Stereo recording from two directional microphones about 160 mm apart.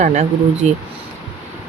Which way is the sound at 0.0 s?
50° right (ahead or behind).